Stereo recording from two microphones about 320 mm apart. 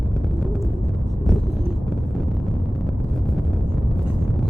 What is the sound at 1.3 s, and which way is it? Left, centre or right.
Vehicle, centre.